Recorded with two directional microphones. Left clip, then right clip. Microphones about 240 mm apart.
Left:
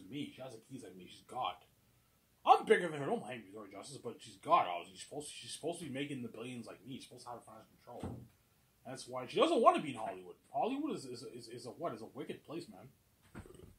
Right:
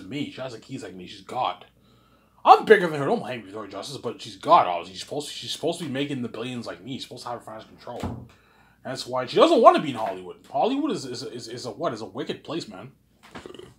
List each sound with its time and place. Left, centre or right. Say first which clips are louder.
1.0 s speech: right 13 dB; centre